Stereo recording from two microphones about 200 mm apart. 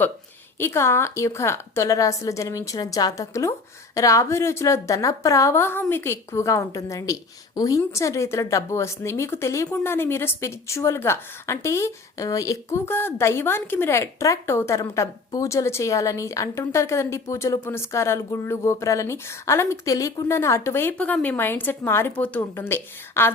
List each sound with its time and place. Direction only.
0.6 s a woman's voice: 15° left (ahead or behind)